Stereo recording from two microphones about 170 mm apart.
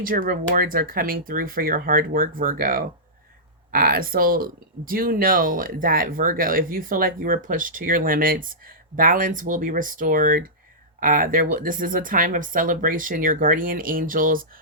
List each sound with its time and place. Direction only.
0.0 s speech: 55° right (ahead or behind)